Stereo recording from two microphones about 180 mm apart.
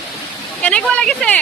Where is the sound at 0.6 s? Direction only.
5° left (ahead or behind).